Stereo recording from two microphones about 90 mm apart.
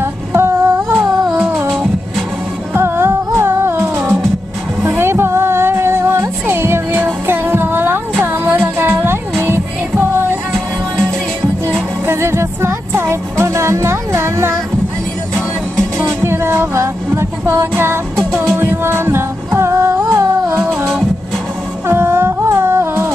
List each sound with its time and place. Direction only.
0.0 s a sound: 25° right (ahead or behind)
0.9 s music: centre (ahead or behind)
2.7 s music: 25° right (ahead or behind)
12.1 s music: 30° right (ahead or behind)
16.0 s music: 25° right (ahead or behind)
21.8 s humming: 25° right (ahead or behind)